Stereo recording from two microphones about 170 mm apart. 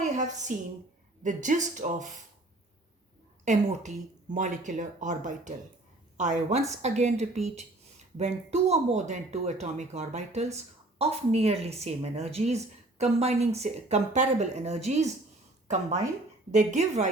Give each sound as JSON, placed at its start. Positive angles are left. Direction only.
{"t": 0.0, "sound": "a woman's voice", "side_deg": -45}
{"t": 3.4, "sound": "a woman's voice", "side_deg": -45}